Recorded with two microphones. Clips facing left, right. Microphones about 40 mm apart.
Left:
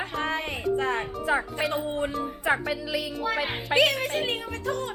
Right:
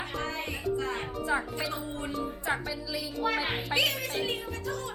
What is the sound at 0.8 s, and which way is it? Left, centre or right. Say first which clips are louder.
Music: left 5 dB; left.